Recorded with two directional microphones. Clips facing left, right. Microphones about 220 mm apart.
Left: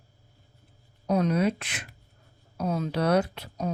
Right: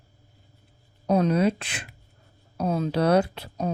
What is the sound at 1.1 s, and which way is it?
Speech, 30° right (ahead or behind).